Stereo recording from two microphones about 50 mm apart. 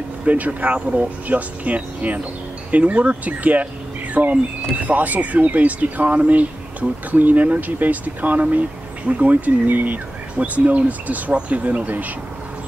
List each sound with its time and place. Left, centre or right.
0.2 s speech: right
0.7 s speech: right
1.2 s speech: right